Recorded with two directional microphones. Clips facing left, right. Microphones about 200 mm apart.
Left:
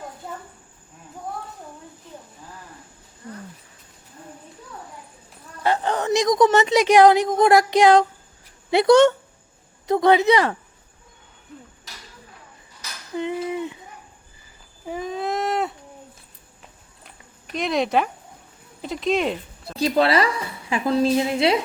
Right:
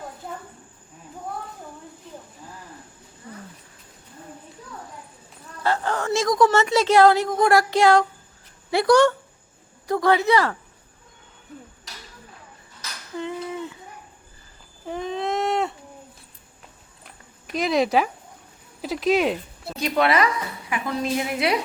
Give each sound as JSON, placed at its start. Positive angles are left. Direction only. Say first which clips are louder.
{"t": 5.6, "sound": "a woman's voice", "louder": "left 2 dB", "side_deg": 20}
{"t": 13.1, "sound": "cutlery", "louder": "left 4 dB", "side_deg": 20}
{"t": 14.8, "sound": "a sound", "louder": "even", "side_deg": 0}
{"t": 17.1, "sound": "a sound", "louder": "right 2 dB", "side_deg": 0}
{"t": 18.8, "sound": "speech", "louder": "right 2 dB", "side_deg": -5}
{"t": 19.7, "sound": "a woman's voice", "louder": "left 2 dB", "side_deg": 30}